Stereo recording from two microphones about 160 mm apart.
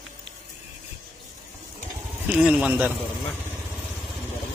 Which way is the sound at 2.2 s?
5° right (ahead or behind).